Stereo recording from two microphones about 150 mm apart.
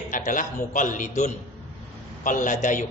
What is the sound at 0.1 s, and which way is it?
A man's voice, 60° left (ahead or behind).